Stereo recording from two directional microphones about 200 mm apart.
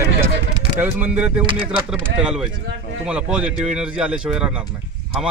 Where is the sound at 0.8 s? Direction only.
10° right (ahead or behind).